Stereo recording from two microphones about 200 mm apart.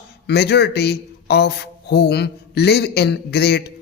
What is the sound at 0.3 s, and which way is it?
Mantra, 55° left (ahead or behind).